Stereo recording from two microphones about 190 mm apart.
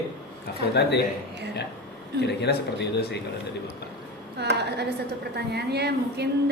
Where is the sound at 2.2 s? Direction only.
60° left (ahead or behind).